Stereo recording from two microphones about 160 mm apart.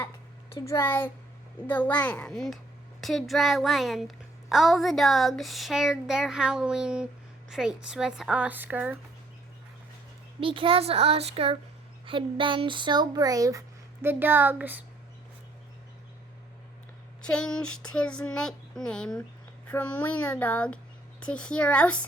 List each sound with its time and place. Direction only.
0.6 s a woman's voice: 15° left (ahead or behind); by 9.0 s 10° right (ahead or behind)
10.4 s speech: 35° right (ahead or behind); by 14.8 s 10° right (ahead or behind)
17.2 s a woman's voice: 5° left (ahead or behind)